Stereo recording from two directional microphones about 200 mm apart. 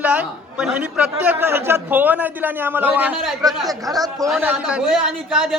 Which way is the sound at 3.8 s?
20° right (ahead or behind).